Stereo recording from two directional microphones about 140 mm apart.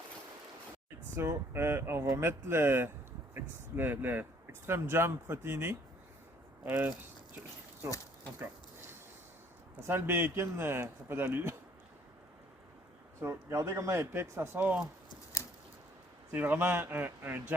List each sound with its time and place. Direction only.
1.1 s speech: 15° right (ahead or behind)
9.8 s speech: 15° right (ahead or behind)
13.2 s speech: 20° right (ahead or behind)
16.3 s speech: 15° right (ahead or behind)